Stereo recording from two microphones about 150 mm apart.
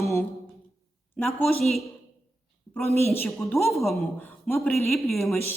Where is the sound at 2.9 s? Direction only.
15° left (ahead or behind).